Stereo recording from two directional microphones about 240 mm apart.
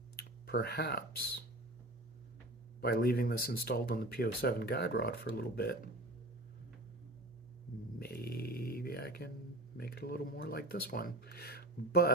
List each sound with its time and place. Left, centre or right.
0.2 s speech: left
2.8 s speech: left
7.9 s a sound: left
9.7 s speech: left